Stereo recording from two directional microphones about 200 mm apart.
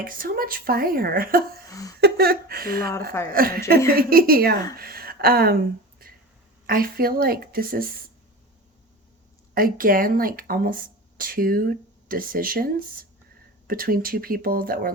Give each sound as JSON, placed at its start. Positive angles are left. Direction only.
{"t": 0.0, "sound": "speech", "side_deg": -45}
{"t": 9.6, "sound": "speech", "side_deg": -45}